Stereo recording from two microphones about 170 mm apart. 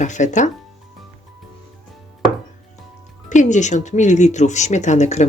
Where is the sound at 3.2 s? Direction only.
45° left (ahead or behind).